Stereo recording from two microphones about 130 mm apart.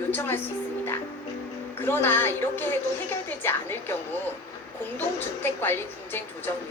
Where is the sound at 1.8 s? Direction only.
15° left (ahead or behind).